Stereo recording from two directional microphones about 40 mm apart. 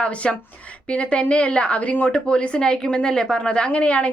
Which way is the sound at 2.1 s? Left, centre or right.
Left.